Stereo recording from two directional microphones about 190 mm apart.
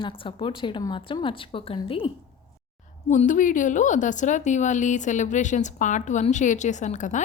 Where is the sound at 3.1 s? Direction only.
40° left (ahead or behind).